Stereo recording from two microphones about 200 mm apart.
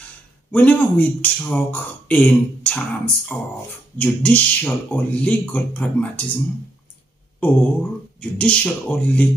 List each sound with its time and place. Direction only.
0.5 s speech: 10° left (ahead or behind)
8.2 s speech: 5° left (ahead or behind)